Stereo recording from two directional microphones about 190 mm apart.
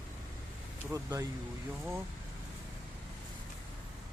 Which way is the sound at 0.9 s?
15° right (ahead or behind).